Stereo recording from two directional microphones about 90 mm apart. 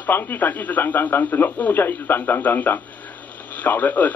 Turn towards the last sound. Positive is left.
turn(degrees=20)  # may be behind; listen again after turning